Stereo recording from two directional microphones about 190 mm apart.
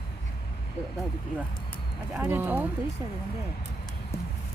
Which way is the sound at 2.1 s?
10° right (ahead or behind).